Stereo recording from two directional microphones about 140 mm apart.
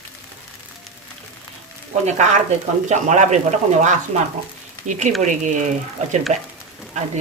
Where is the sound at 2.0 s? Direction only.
55° right (ahead or behind).